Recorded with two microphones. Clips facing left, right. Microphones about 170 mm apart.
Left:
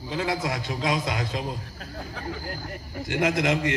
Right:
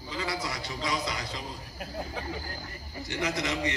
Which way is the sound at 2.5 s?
55° left (ahead or behind).